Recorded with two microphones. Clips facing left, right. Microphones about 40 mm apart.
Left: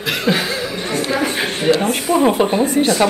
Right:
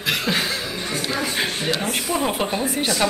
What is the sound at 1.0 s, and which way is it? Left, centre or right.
Music, left.